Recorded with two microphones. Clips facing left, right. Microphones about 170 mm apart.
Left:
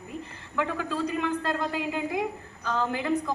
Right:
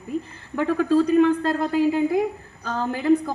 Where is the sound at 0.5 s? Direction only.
40° right (ahead or behind).